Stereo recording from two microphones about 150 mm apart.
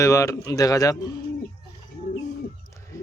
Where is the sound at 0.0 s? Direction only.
20° left (ahead or behind).